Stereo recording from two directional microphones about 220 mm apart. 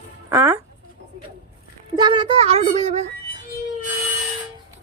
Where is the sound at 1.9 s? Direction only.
20° right (ahead or behind).